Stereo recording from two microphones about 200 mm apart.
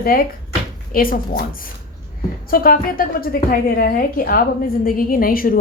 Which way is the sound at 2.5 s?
45° left (ahead or behind).